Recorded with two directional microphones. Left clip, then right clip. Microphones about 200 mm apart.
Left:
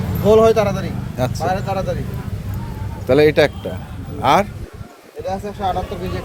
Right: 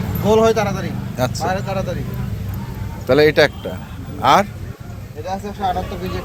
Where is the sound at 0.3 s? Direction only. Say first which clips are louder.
Left 2 dB; 50° left (ahead or behind).